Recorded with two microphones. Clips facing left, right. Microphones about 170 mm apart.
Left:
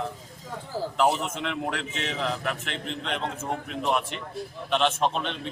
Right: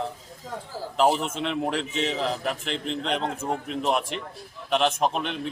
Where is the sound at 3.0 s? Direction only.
35° right (ahead or behind).